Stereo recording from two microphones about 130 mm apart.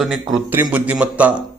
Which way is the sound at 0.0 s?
Centre (ahead or behind).